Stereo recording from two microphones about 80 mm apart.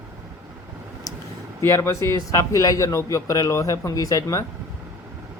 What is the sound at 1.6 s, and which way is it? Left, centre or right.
A man's voice, left.